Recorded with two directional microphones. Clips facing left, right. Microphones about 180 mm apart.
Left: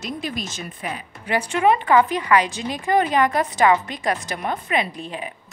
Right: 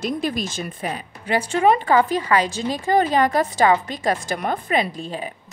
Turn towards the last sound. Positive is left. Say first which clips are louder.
# right 2 dB
turn(degrees=-35)  # may be behind; listen again after turning